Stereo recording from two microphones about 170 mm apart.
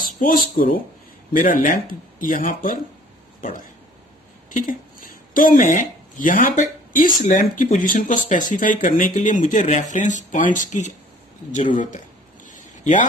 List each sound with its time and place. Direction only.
0.2 s speech: 55° left (ahead or behind)
4.4 s speech: 50° left (ahead or behind)
12.8 s speech: 50° left (ahead or behind)